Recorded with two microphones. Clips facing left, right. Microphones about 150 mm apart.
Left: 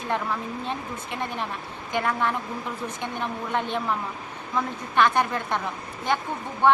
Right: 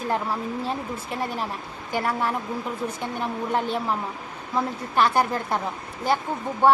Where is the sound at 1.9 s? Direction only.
35° right (ahead or behind).